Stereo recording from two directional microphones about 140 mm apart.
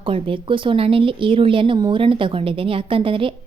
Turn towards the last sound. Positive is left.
turn(degrees=-40)  # may be behind; listen again after turning